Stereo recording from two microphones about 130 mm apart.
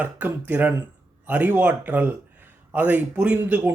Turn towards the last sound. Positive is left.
turn(degrees=-15)  # may be behind; listen again after turning